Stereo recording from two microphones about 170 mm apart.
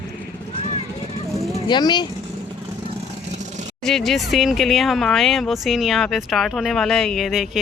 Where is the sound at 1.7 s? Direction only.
25° left (ahead or behind).